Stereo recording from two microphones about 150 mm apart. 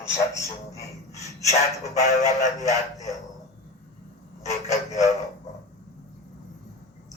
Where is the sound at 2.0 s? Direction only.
50° left (ahead or behind).